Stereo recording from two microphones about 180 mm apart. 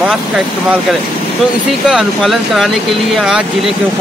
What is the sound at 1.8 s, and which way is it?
Speech, centre (ahead or behind).